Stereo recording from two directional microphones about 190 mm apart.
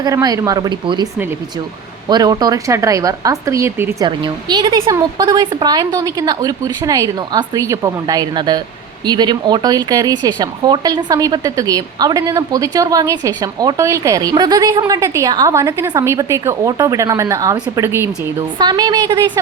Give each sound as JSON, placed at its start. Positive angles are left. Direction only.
{"t": 0.0, "sound": "speech", "side_deg": -20}
{"t": 2.0, "sound": "speech", "side_deg": -20}